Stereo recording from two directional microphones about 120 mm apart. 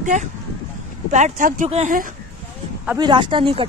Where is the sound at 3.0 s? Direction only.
40° right (ahead or behind).